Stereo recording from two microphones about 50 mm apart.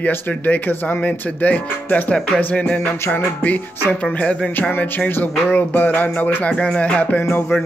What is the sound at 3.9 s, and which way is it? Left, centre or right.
Speech, left.